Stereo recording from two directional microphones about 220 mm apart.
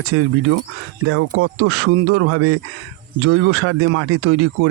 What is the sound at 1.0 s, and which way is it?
Speech, 85° right.